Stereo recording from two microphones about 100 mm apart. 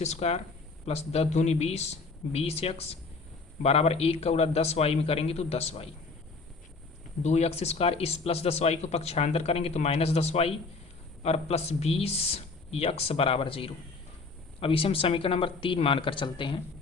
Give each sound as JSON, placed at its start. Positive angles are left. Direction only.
{"t": 0.0, "sound": "speech", "side_deg": 90}
{"t": 7.3, "sound": "speech", "side_deg": 90}